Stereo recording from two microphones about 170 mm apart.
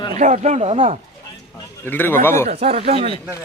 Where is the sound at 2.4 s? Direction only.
35° right (ahead or behind).